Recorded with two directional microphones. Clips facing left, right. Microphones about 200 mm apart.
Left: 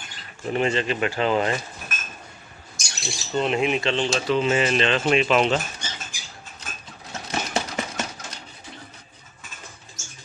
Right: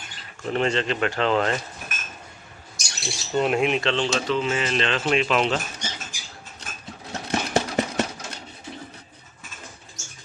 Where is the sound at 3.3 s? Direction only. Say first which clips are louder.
Right 1 dB; 5° right (ahead or behind); by 4.7 s 20° left (ahead or behind).